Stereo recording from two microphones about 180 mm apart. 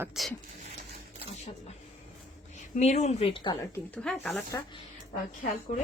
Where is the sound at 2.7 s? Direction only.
40° left (ahead or behind); by 3.8 s 25° left (ahead or behind).